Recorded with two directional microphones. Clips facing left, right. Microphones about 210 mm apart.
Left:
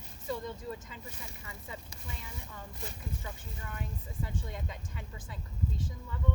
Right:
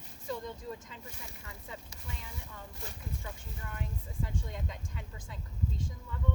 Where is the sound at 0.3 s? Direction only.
5° left (ahead or behind).